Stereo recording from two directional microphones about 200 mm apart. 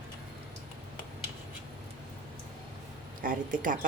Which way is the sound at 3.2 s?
45° right (ahead or behind).